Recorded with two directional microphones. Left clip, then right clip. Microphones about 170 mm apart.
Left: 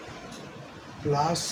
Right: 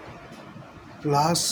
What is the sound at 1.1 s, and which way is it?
Speech, 60° right (ahead or behind).